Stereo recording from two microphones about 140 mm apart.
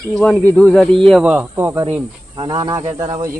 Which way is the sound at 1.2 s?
10° right (ahead or behind).